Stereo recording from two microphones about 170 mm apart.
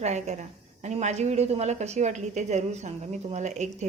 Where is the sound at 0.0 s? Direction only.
40° right (ahead or behind).